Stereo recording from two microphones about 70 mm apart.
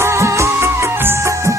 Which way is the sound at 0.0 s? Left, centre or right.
Right.